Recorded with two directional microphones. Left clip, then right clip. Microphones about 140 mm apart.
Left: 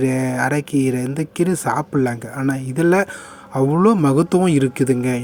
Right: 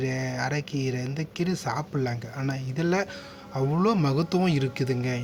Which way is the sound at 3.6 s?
40° left (ahead or behind).